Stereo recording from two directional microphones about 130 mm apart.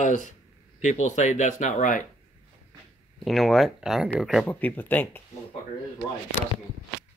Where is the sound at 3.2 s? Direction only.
Centre (ahead or behind).